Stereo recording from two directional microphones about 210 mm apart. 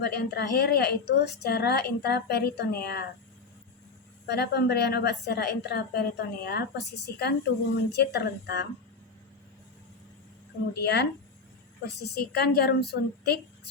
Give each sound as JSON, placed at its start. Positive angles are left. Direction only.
{"t": 0.0, "sound": "a woman's voice", "side_deg": 50}
{"t": 4.3, "sound": "a woman's voice", "side_deg": 50}
{"t": 10.8, "sound": "a woman's voice", "side_deg": 55}